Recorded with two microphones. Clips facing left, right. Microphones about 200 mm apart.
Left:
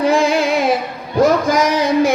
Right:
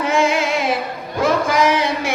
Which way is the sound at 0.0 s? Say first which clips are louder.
Left 3 dB; 35° left (ahead or behind).